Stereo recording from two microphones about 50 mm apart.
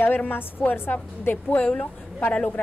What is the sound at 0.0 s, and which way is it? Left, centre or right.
Speech, left.